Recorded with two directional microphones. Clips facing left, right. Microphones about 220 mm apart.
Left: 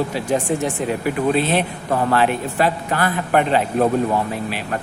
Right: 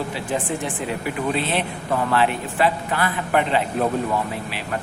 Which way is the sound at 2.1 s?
45° left (ahead or behind).